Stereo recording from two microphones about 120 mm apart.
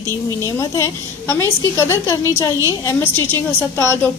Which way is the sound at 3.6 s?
20° left (ahead or behind).